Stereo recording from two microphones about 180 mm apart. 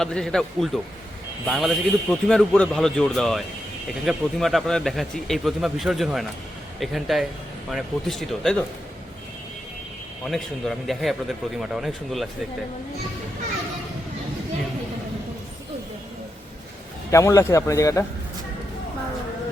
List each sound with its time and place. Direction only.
0.0 s speech: 5° left (ahead or behind)
10.2 s speech: centre (ahead or behind)
17.1 s a man's voice: 15° left (ahead or behind)